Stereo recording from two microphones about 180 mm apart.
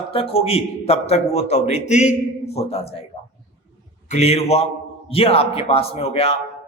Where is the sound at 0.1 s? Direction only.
30° left (ahead or behind).